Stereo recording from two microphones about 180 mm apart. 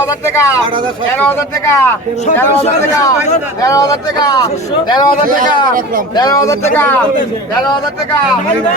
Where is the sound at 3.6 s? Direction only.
20° left (ahead or behind).